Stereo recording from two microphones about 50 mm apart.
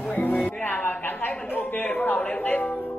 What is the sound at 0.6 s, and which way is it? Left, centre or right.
Music, left.